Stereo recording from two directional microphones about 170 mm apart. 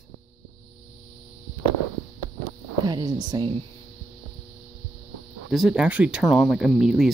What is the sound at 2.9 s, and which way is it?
Speech, 20° right (ahead or behind).